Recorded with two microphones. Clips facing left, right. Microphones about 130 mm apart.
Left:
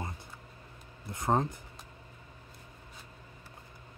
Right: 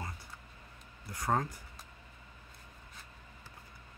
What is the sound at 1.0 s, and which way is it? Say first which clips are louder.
Speech: left 4 dB; 25° left (ahead or behind).